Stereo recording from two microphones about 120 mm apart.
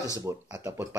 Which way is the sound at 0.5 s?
25° right (ahead or behind).